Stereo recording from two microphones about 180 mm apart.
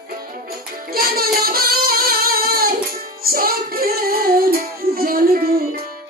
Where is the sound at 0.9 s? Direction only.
55° right (ahead or behind).